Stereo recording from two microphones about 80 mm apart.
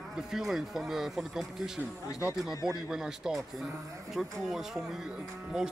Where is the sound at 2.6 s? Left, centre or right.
Centre.